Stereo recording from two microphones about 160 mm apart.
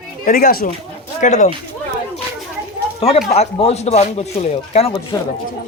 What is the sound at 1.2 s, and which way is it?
Speech, 50° left (ahead or behind).